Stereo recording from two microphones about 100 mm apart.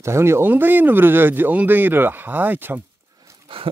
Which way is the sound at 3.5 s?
60° right (ahead or behind).